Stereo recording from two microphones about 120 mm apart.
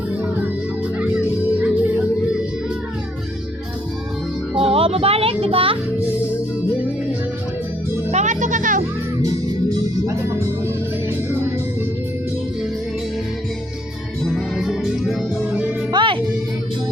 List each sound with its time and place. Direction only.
0.9 s music: 10° right (ahead or behind)
4.5 s music: 50° right (ahead or behind)
8.1 s music: 85° right
9.2 s music: 30° right (ahead or behind)
14.3 s music: centre (ahead or behind)
15.9 s music: 45° right (ahead or behind)